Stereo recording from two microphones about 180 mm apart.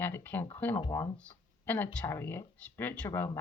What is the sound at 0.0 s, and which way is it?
Speech, 10° left (ahead or behind).